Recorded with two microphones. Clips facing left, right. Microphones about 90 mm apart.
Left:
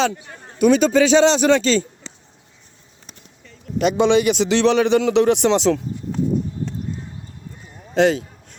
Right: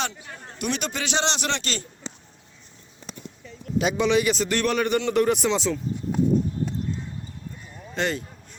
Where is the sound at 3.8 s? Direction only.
65° left (ahead or behind); by 5.8 s 85° left.